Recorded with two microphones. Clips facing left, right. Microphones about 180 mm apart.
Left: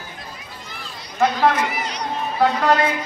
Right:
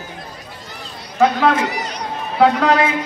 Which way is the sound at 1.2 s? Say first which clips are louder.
Right 3 dB; 50° right (ahead or behind).